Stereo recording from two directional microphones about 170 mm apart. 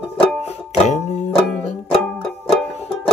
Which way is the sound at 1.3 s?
5° left (ahead or behind).